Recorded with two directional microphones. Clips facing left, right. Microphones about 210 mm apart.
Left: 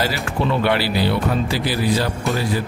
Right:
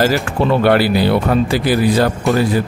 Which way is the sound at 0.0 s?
45° right (ahead or behind).